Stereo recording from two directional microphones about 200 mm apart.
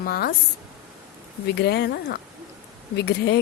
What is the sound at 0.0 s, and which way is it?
Speech, 50° left (ahead or behind).